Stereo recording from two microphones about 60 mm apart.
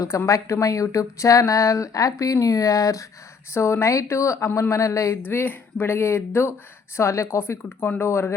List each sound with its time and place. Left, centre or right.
0.3 s speech: left
3.5 s a woman's voice: left
5.2 s a woman's voice: left